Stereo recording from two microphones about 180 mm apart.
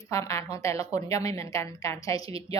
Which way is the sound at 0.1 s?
15° left (ahead or behind).